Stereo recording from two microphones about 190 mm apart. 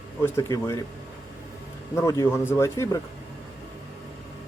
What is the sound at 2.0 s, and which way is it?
A man's voice, 15° left (ahead or behind).